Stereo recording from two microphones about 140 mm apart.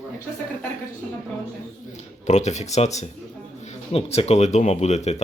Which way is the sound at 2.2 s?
55° left (ahead or behind).